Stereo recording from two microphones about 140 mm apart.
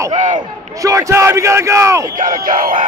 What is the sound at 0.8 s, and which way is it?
Speech, 25° right (ahead or behind).